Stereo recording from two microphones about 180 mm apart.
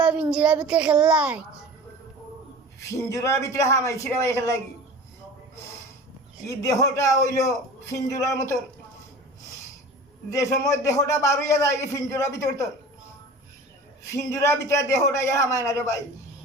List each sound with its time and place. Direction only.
0.0 s a child's voice: 5° right (ahead or behind)
2.9 s a man's voice: 15° left (ahead or behind)
6.5 s a man's voice: 15° left (ahead or behind)
10.3 s a man's voice: 15° left (ahead or behind)
14.1 s a man's voice: 15° left (ahead or behind)